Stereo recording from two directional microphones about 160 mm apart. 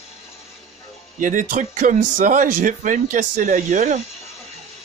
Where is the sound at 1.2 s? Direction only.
55° right (ahead or behind).